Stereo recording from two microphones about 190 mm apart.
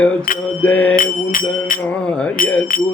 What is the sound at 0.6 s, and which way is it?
Music, 5° left (ahead or behind).